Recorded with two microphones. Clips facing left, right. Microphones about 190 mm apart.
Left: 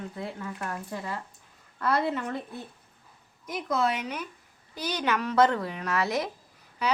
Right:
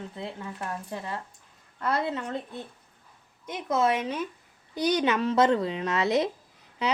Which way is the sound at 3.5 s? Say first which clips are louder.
Right 2 dB; 25° right (ahead or behind).